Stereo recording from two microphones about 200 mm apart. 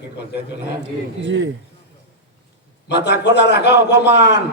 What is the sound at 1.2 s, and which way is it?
Speech, 60° right (ahead or behind).